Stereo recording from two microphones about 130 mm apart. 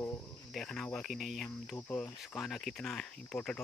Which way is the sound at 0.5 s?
5° left (ahead or behind).